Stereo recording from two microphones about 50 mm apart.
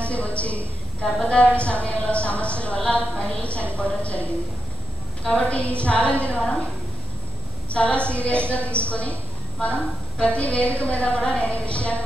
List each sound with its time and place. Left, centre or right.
0.1 s a woman's voice: left
7.7 s a woman's voice: left